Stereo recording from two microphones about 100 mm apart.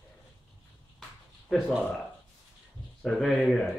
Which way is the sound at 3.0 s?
5° left (ahead or behind).